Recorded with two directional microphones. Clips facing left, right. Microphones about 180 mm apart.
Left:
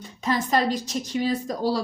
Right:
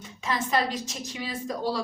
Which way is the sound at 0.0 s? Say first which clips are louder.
Left 5 dB; 40° left (ahead or behind).